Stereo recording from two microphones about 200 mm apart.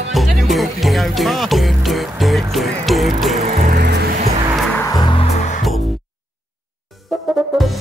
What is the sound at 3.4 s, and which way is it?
Music, 35° right (ahead or behind).